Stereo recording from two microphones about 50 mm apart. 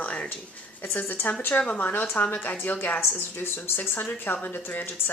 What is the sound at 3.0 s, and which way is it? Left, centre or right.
Speech, left.